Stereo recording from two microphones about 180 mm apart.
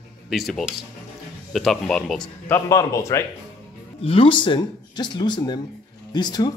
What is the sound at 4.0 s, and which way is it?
Speech, 30° left (ahead or behind).